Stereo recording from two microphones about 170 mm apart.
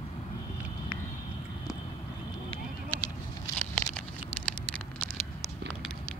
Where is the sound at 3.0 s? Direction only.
20° left (ahead or behind).